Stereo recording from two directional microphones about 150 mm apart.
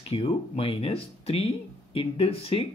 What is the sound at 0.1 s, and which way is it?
Speech, 40° left (ahead or behind).